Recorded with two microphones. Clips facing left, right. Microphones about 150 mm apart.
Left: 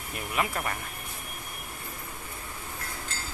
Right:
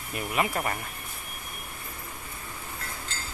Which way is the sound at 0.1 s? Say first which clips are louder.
Right 2 dB; centre (ahead or behind).